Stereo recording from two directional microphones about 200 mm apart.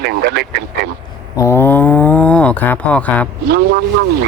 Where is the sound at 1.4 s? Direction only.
10° left (ahead or behind).